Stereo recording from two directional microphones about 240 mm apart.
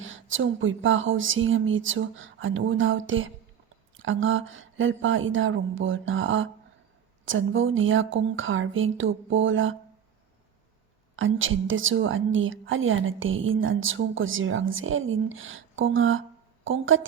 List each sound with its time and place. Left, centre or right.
0.0 s a woman's voice: right
11.2 s a woman's voice: right